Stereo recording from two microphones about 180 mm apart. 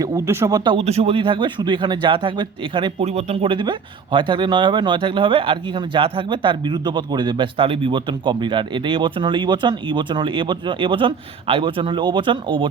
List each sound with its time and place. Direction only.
0.0 s speech: 15° right (ahead or behind)